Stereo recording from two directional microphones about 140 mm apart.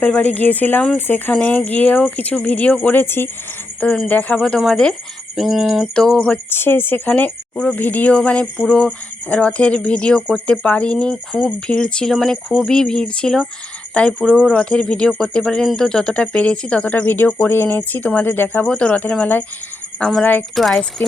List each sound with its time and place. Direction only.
0.0 s speech: 10° left (ahead or behind)